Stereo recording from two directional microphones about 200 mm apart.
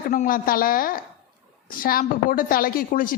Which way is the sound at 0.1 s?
40° left (ahead or behind).